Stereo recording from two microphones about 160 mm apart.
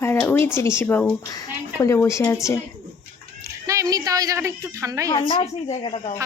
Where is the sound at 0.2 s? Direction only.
15° left (ahead or behind).